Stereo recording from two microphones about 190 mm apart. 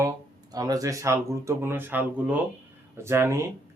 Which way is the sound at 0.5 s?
20° right (ahead or behind).